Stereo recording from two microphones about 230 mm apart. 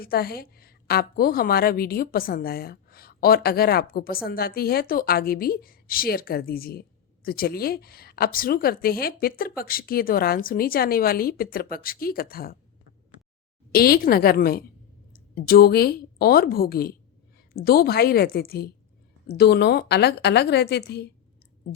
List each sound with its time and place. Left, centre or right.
0.0 s a woman's voice: left
13.7 s a woman's voice: left